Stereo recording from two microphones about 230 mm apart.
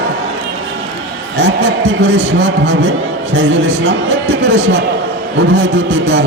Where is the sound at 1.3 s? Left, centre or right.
Right.